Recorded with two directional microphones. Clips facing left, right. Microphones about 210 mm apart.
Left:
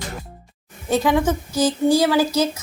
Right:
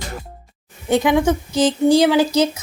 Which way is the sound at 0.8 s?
20° right (ahead or behind).